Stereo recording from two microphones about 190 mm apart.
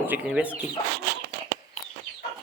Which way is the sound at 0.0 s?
5° right (ahead or behind).